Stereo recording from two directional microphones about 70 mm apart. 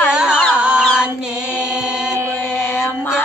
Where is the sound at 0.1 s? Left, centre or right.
Centre.